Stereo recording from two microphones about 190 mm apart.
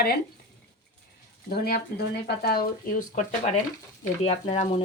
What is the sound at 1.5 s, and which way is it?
Speech, 55° left (ahead or behind).